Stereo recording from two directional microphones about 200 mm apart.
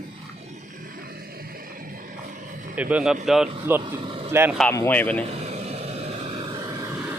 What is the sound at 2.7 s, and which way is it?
Speech, 5° right (ahead or behind).